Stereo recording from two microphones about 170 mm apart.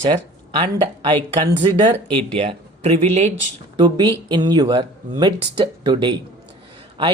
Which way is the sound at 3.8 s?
25° right (ahead or behind).